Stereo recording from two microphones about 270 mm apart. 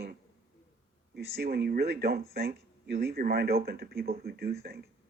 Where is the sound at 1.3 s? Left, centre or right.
Right.